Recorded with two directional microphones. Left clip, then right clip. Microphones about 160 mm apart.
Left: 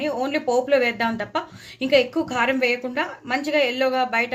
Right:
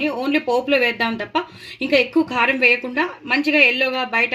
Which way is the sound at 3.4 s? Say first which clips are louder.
Right 5 dB; 45° right (ahead or behind).